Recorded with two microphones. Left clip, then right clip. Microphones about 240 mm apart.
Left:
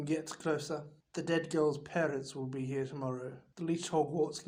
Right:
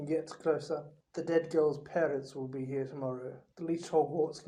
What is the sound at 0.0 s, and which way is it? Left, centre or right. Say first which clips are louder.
Speech: right 3 dB; left.